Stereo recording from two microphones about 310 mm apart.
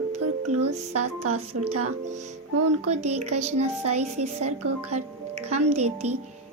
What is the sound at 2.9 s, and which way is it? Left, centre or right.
Speech, right.